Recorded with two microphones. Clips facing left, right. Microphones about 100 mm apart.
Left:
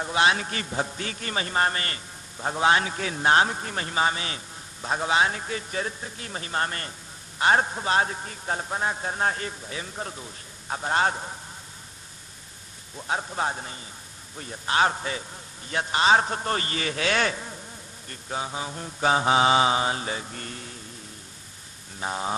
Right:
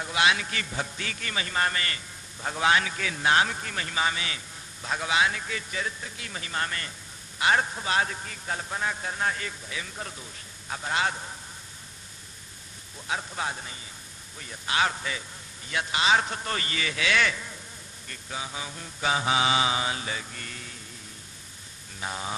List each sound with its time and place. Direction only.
0.0 s a man's voice: 35° left (ahead or behind)
13.0 s a man's voice: 30° left (ahead or behind)
22.0 s a man's voice: 30° left (ahead or behind)